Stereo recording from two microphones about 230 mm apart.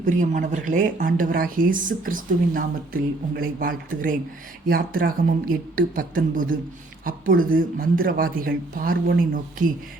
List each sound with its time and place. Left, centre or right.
0.0 s speech: right